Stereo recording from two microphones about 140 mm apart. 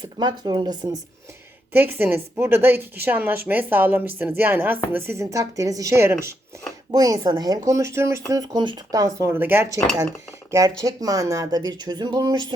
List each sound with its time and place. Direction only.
0.0 s speech: 30° right (ahead or behind)
1.7 s a woman's voice: 15° right (ahead or behind)